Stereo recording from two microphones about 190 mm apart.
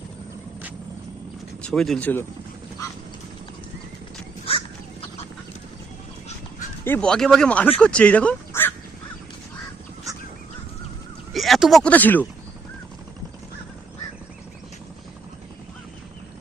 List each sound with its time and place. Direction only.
1.6 s speech: centre (ahead or behind)
4.4 s crow: 30° left (ahead or behind)
6.8 s speech: 10° left (ahead or behind)
11.3 s speech: centre (ahead or behind)